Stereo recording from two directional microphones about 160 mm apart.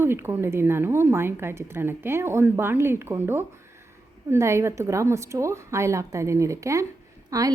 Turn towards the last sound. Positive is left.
turn(degrees=-20)  # may be behind; listen again after turning